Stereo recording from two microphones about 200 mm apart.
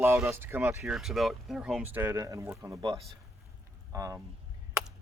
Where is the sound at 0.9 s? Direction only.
Centre (ahead or behind).